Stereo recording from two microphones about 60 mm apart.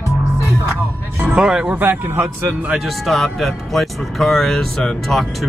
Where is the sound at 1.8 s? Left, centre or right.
Right.